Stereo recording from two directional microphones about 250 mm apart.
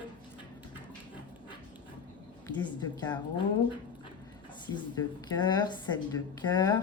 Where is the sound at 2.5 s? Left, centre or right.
Centre.